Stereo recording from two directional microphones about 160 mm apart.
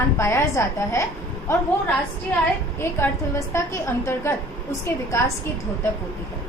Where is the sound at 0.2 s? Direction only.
15° left (ahead or behind).